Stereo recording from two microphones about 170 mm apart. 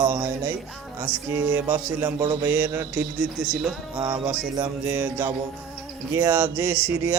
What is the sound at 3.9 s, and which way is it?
A man's voice, 15° right (ahead or behind).